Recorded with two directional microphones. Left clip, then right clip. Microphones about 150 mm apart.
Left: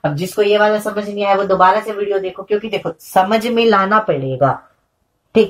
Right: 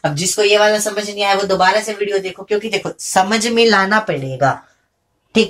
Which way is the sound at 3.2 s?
60° left (ahead or behind).